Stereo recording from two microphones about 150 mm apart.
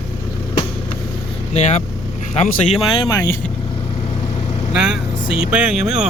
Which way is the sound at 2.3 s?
45° left (ahead or behind).